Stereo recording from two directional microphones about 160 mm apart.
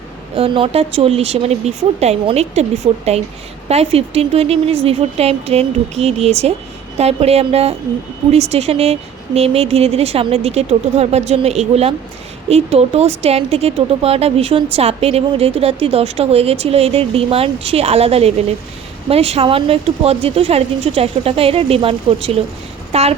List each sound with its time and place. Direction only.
0.3 s speech: 35° right (ahead or behind)